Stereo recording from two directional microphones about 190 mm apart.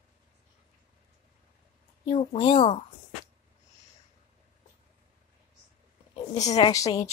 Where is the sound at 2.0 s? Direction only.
30° left (ahead or behind).